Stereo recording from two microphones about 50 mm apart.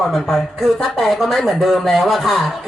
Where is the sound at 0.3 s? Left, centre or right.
Centre.